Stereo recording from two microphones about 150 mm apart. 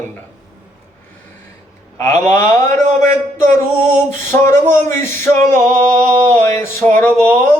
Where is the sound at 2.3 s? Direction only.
20° left (ahead or behind).